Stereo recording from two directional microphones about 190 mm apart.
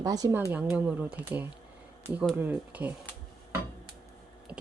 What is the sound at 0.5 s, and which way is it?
Speech, 5° right (ahead or behind).